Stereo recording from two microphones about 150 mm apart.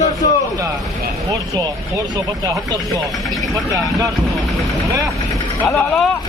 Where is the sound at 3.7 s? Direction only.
25° right (ahead or behind).